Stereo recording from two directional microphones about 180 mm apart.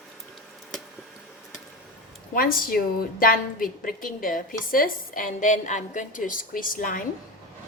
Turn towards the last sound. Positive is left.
turn(degrees=50)  # may be behind; listen again after turning